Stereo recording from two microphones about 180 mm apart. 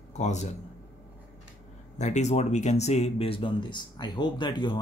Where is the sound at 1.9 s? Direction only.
40° left (ahead or behind).